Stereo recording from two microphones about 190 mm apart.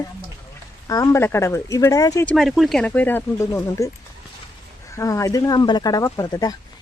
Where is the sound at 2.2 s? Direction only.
Centre (ahead or behind); by 6.6 s 20° left (ahead or behind).